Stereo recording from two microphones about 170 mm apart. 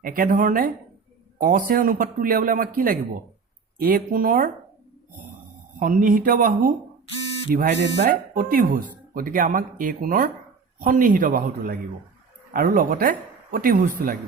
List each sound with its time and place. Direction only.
0.0 s speech: 55° right (ahead or behind)
5.8 s speech: 55° right (ahead or behind)